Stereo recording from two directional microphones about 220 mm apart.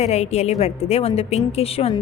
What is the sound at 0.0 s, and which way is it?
A woman's voice, 30° left (ahead or behind).